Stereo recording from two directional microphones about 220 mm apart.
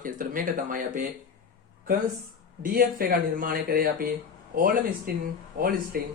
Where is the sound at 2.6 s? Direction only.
40° right (ahead or behind).